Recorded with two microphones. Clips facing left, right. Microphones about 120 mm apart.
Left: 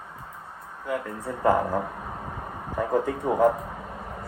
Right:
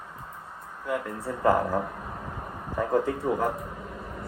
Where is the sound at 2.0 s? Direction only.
15° left (ahead or behind).